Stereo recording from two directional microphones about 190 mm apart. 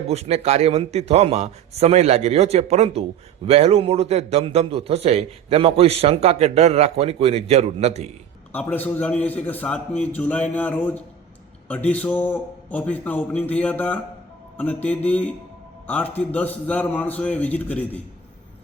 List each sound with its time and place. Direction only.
0.1 s a man's voice: 35° right (ahead or behind)
8.5 s a man's voice: 10° left (ahead or behind)